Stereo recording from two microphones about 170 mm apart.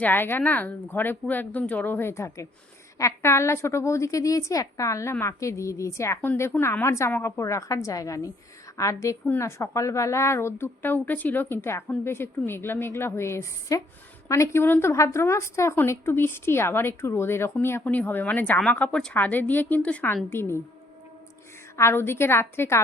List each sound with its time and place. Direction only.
0.0 s a woman's voice: 10° left (ahead or behind)
21.8 s a woman's voice: 15° left (ahead or behind)